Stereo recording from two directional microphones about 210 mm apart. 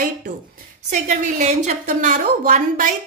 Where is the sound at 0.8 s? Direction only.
35° right (ahead or behind).